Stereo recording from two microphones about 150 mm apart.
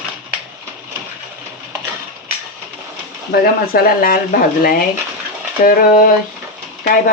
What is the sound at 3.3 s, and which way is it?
Speech, 85° left.